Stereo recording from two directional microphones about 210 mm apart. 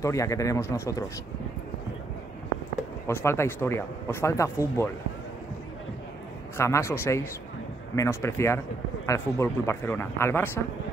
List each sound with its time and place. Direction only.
0.0 s speech: 15° left (ahead or behind)
3.1 s speech: 10° left (ahead or behind)
6.5 s speech: 15° left (ahead or behind)